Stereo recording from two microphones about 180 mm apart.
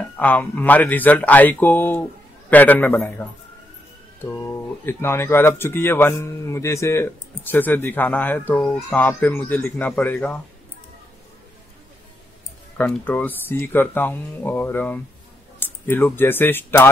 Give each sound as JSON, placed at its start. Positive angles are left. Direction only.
{"t": 0.2, "sound": "speech", "side_deg": 10}
{"t": 12.7, "sound": "speech", "side_deg": 10}